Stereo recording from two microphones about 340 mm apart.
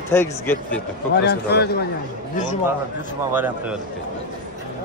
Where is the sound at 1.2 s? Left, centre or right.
Left.